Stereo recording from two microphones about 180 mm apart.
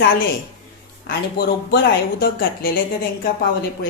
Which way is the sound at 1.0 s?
65° left (ahead or behind).